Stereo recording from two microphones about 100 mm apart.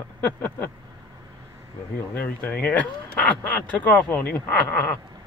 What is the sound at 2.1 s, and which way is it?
Speech, 15° left (ahead or behind).